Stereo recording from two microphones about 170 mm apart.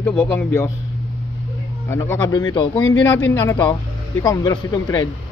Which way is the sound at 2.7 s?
15° left (ahead or behind).